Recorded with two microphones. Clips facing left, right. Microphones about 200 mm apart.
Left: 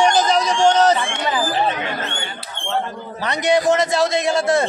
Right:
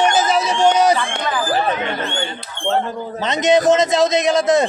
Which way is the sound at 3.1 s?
20° right (ahead or behind).